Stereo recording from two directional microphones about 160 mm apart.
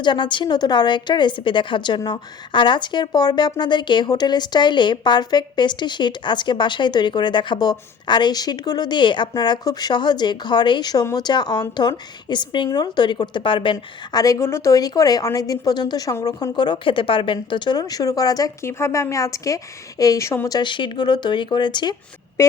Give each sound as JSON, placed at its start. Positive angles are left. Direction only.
{"t": 0.0, "sound": "a woman's voice", "side_deg": 30}